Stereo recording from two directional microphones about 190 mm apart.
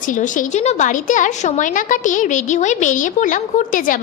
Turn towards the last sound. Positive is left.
turn(degrees=45)  # may be behind; listen again after turning